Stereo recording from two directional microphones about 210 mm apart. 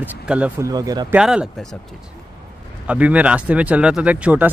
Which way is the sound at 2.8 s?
5° right (ahead or behind).